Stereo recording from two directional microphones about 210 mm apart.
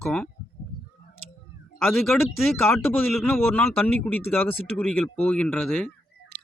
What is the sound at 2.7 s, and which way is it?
A man's voice, 10° left (ahead or behind).